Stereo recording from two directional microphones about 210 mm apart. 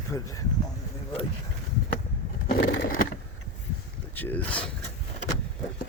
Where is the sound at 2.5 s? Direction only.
45° left (ahead or behind).